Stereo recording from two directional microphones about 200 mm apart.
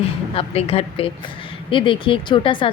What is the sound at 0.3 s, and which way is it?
Speech, 30° left (ahead or behind).